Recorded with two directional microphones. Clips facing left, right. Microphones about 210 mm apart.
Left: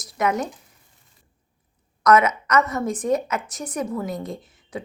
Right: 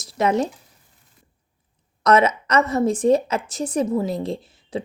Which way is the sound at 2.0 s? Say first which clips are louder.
Right 1 dB; 30° right (ahead or behind).